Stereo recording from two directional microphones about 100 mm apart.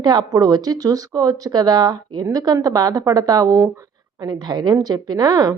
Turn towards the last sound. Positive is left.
turn(degrees=-40)  # may be behind; listen again after turning